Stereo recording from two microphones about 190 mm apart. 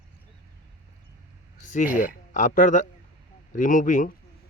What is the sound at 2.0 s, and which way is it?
Speech, 45° left (ahead or behind).